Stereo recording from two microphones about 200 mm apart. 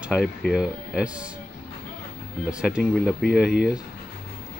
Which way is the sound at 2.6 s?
Centre (ahead or behind).